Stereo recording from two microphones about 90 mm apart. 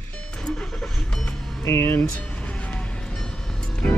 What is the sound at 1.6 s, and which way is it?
Speech, 25° left (ahead or behind).